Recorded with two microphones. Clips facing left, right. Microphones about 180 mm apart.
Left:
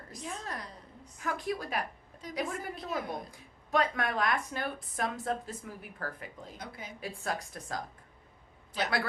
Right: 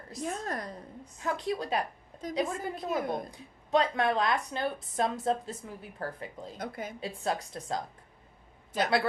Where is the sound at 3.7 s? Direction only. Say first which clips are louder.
Right 4 dB; 25° right (ahead or behind).